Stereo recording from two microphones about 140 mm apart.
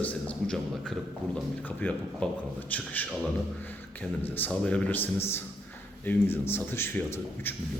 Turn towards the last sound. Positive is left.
turn(degrees=15)  # may be behind; listen again after turning